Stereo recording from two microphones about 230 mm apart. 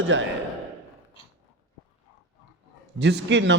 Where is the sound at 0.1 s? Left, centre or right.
Right.